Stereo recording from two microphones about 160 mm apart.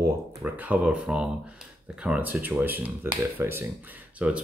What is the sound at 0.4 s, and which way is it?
Speech, 10° right (ahead or behind).